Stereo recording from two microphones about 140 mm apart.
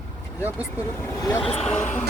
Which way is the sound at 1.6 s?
10° left (ahead or behind).